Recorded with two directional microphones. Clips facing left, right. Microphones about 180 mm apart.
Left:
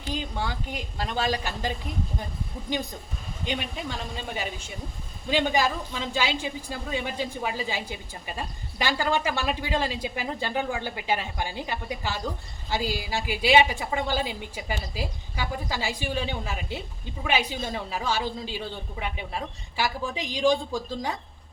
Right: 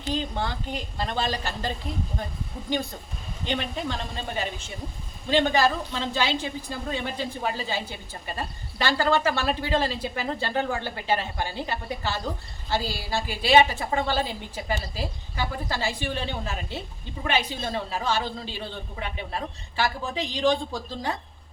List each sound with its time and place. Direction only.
0.1 s a woman's voice: 10° left (ahead or behind)